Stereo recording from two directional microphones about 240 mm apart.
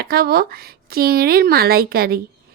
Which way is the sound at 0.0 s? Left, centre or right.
Right.